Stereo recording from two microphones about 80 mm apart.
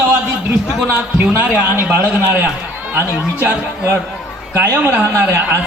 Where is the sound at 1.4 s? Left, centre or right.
Right.